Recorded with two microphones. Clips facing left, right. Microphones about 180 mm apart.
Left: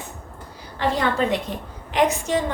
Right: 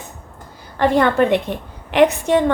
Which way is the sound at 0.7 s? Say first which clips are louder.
Right 7 dB; 55° right (ahead or behind).